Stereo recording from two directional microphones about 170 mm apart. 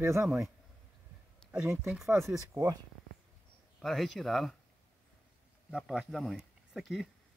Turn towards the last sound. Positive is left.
turn(degrees=-5)  # may be behind; listen again after turning